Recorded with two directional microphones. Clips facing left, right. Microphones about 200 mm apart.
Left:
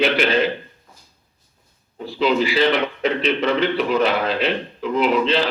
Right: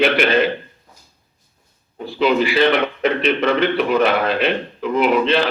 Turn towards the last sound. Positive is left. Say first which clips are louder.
# right 2 dB
turn(degrees=-60)  # may be behind; listen again after turning